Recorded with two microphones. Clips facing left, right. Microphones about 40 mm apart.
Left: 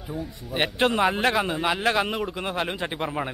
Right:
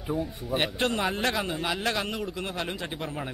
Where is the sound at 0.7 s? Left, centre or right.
Centre.